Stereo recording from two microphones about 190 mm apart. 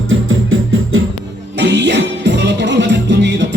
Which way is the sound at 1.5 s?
65° right (ahead or behind).